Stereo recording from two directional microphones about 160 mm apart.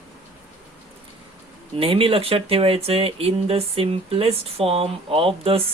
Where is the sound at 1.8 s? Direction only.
35° right (ahead or behind).